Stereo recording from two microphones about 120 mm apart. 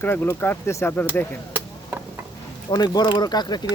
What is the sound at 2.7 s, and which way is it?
Speech, 35° left (ahead or behind).